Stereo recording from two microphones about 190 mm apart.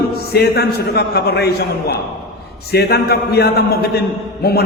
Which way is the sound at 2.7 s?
60° left (ahead or behind).